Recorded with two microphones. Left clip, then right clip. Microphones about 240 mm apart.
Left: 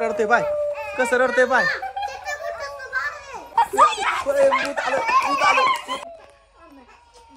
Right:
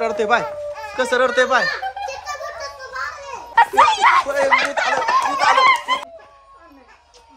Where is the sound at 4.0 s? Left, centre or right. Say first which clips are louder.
Right 9 dB; right.